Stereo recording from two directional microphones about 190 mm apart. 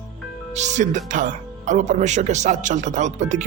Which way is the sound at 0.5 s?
40° right (ahead or behind).